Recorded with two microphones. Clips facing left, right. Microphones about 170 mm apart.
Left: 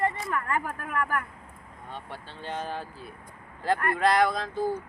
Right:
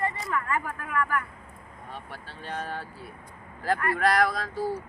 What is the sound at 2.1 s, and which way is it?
Speech, 25° left (ahead or behind).